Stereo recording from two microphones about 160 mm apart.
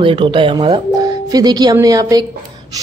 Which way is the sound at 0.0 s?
30° right (ahead or behind).